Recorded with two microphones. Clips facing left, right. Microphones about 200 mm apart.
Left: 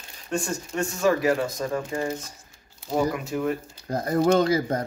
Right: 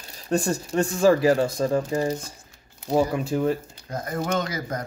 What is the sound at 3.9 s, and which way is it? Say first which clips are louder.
Speech: left 6 dB; 35° left (ahead or behind).